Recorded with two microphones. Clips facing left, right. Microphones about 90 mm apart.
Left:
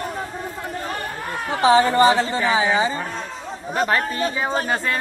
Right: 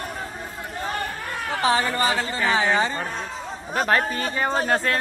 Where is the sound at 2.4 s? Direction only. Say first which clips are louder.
Left 2 dB; 10° left (ahead or behind).